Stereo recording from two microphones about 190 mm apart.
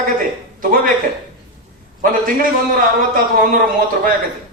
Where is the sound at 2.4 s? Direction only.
50° right (ahead or behind).